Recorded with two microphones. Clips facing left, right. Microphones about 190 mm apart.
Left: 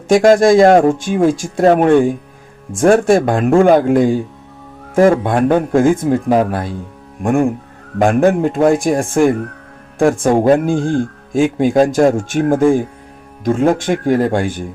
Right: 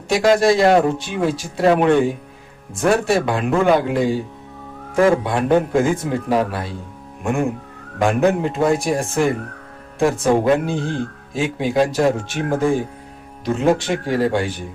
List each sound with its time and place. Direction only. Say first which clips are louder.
0.1 s speech: left 6 dB; 50° left (ahead or behind)